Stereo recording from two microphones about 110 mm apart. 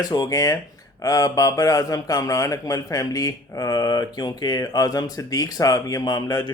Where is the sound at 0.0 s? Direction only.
35° left (ahead or behind).